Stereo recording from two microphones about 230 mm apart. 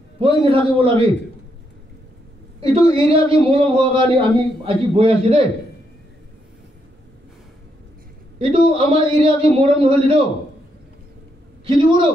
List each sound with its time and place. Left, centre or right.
0.2 s speech: right
2.6 s speech: right
8.4 s speech: right